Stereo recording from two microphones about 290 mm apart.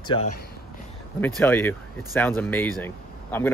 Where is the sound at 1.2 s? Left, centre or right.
Centre.